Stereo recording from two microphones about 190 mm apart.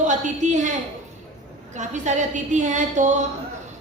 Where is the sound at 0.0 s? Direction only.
40° right (ahead or behind).